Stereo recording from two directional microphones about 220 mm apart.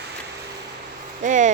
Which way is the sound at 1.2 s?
35° right (ahead or behind).